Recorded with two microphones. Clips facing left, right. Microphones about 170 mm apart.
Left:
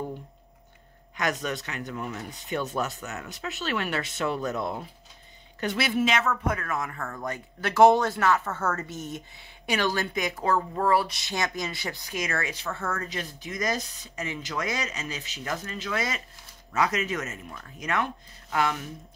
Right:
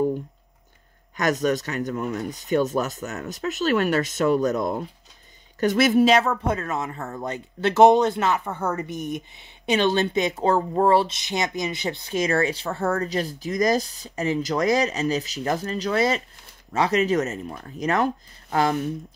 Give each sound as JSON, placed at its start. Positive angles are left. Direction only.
{"t": 1.1, "sound": "speech", "side_deg": -40}